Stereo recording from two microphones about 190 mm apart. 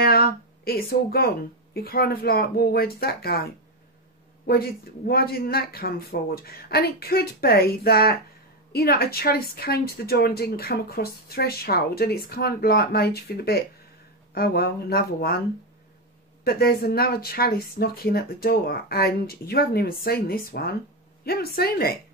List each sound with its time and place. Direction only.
0.0 s speech: 55° left (ahead or behind)
4.5 s speech: 55° left (ahead or behind)
16.4 s speech: 55° left (ahead or behind)